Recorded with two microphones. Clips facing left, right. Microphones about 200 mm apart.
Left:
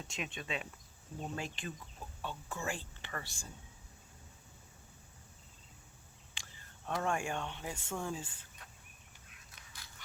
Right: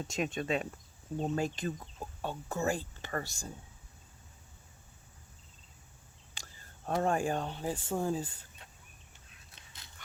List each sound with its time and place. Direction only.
0.1 s speech: 40° right (ahead or behind)
6.3 s speech: 40° right (ahead or behind)
9.6 s dog: 25° right (ahead or behind)